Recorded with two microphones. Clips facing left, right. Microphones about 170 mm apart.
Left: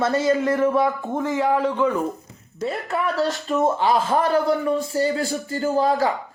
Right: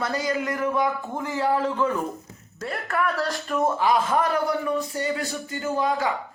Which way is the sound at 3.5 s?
25° left (ahead or behind).